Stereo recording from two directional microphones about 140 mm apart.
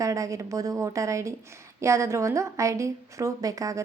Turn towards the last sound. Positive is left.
turn(degrees=-25)  # may be behind; listen again after turning